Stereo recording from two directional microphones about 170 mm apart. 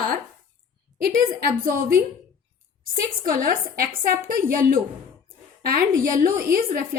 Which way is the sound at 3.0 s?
55° right (ahead or behind).